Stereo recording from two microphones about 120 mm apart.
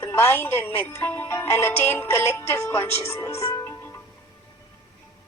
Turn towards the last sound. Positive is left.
turn(degrees=25)  # may be behind; listen again after turning